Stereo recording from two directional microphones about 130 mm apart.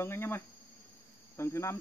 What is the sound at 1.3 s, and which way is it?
Cricket, 20° left (ahead or behind).